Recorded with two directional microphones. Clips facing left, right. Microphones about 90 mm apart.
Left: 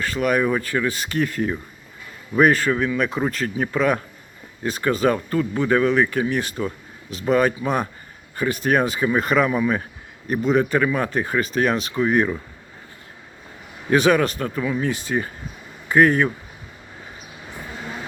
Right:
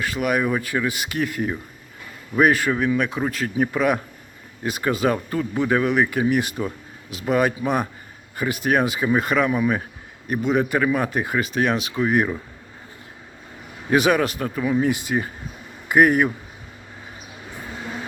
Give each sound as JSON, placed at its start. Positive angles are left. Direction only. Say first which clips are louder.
{"t": 0.0, "sound": "speech", "louder": "left 2 dB", "side_deg": -10}
{"t": 13.9, "sound": "speech", "louder": "left 1 dB", "side_deg": -10}